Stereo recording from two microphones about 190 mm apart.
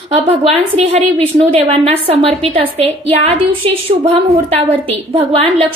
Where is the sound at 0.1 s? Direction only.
30° right (ahead or behind).